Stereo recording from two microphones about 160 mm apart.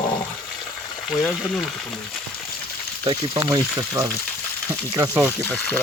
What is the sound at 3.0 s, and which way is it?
Speech, 20° right (ahead or behind).